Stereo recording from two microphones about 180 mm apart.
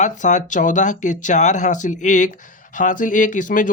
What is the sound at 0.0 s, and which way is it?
Speech, 40° left (ahead or behind).